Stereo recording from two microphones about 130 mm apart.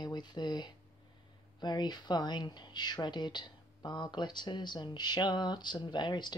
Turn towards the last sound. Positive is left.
turn(degrees=35)  # may be behind; listen again after turning